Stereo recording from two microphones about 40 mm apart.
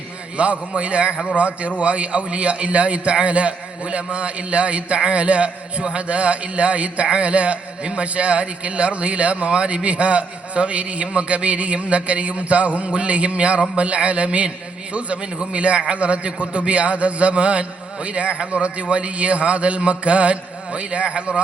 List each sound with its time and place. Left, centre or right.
0.3 s a man's voice: right